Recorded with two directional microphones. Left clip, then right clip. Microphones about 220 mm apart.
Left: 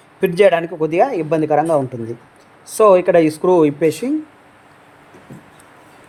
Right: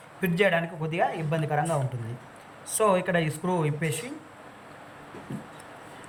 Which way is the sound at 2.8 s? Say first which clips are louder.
Left 13 dB; 35° left (ahead or behind).